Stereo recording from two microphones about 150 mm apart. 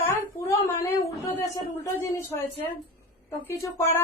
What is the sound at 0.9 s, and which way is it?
Speech, 15° left (ahead or behind).